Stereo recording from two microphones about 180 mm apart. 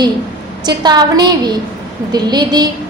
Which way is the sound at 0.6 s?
25° right (ahead or behind).